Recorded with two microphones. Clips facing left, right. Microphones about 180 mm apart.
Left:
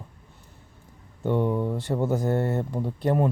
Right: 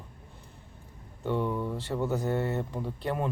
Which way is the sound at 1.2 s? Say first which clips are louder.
Left 5 dB; 50° left (ahead or behind).